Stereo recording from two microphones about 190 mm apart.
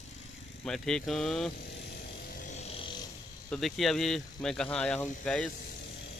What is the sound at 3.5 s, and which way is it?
Speech, centre (ahead or behind).